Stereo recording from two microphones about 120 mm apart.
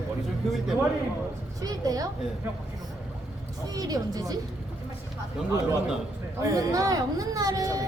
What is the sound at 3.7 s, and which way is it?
Speech, 30° right (ahead or behind).